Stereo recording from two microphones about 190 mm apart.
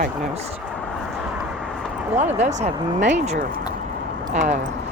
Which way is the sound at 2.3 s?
35° right (ahead or behind).